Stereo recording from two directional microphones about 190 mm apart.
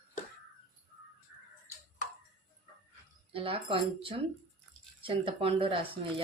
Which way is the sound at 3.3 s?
30° right (ahead or behind).